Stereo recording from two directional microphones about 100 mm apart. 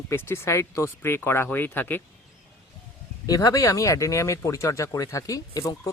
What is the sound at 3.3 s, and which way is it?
Speech, 35° left (ahead or behind).